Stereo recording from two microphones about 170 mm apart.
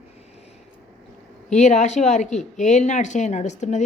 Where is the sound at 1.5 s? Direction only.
45° left (ahead or behind).